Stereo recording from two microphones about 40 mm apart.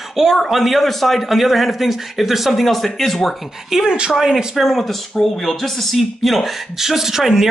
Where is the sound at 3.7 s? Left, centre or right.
Centre.